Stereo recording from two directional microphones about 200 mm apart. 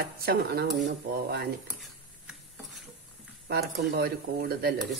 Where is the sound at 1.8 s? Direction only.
Centre (ahead or behind).